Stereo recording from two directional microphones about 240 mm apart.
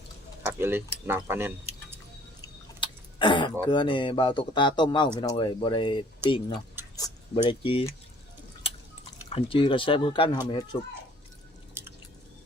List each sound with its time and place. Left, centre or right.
0.4 s speech: centre
2.4 s a sound: centre
3.7 s speech: centre
6.8 s a sound: centre
7.4 s speech: left
8.7 s chewing: left
9.3 s speech: left
11.7 s squish: centre